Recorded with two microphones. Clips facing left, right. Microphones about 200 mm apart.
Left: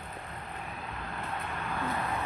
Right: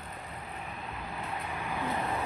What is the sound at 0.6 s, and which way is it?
Vehicle, centre (ahead or behind).